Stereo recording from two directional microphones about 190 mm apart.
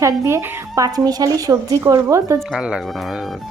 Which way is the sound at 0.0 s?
15° right (ahead or behind).